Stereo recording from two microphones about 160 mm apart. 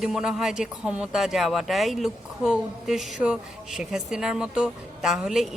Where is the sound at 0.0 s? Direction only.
5° right (ahead or behind).